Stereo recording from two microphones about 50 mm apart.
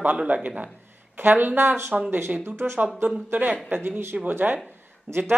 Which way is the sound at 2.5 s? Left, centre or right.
Right.